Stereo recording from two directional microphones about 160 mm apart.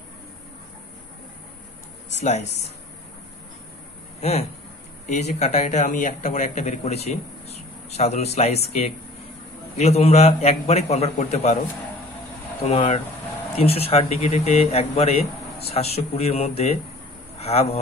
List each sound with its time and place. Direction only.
2.1 s speech: 45° left (ahead or behind)
4.2 s a man's voice: 40° left (ahead or behind)
12.6 s a man's voice: 40° left (ahead or behind)